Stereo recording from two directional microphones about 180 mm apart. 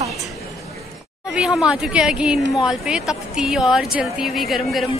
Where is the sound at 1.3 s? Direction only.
5° right (ahead or behind).